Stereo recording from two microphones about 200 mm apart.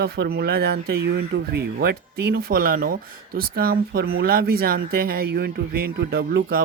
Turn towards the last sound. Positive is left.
turn(degrees=-50)  # may be behind; listen again after turning